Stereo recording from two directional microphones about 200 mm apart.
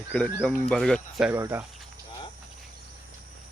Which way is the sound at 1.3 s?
10° right (ahead or behind).